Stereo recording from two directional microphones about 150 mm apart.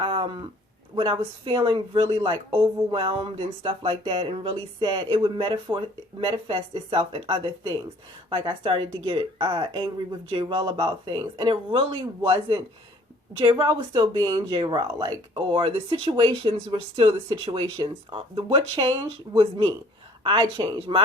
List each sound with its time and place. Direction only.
0.0 s a sound: 35° right (ahead or behind)
0.9 s speech: 35° right (ahead or behind)
13.4 s speech: 30° right (ahead or behind)